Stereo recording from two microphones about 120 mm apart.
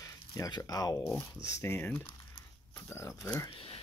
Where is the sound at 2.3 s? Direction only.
20° left (ahead or behind).